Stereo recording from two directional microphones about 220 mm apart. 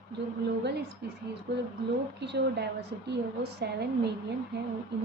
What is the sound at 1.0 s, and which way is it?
Speech, 50° right (ahead or behind).